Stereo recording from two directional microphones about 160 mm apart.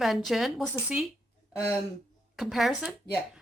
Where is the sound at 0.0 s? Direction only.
Centre (ahead or behind).